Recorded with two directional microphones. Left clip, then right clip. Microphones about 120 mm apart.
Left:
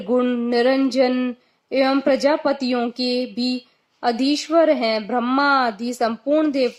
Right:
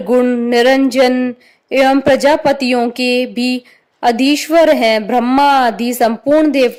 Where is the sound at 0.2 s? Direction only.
35° right (ahead or behind).